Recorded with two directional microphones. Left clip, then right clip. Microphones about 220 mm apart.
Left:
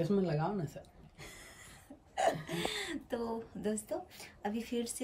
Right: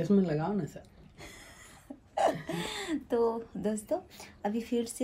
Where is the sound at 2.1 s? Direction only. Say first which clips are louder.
Right 4 dB; centre (ahead or behind).